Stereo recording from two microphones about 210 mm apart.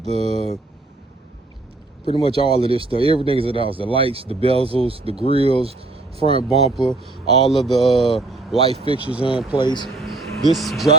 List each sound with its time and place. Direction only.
0.0 s speech: 30° right (ahead or behind)
2.0 s speech: 25° left (ahead or behind)
2.3 s speech: 25° right (ahead or behind)
6.7 s speech: centre (ahead or behind)
8.5 s speech: 30° right (ahead or behind)
9.2 s speech: 20° left (ahead or behind)
9.8 s a sound: centre (ahead or behind)
10.5 s speech: centre (ahead or behind)